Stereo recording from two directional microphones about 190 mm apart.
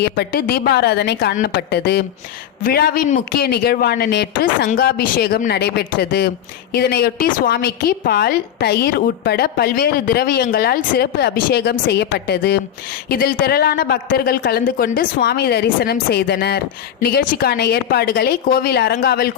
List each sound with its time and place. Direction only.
0.0 s a woman's voice: 55° left (ahead or behind)